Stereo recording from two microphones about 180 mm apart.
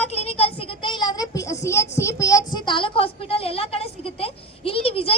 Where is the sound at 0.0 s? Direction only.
35° left (ahead or behind).